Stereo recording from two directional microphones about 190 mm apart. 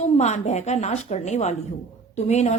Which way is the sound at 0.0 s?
35° left (ahead or behind).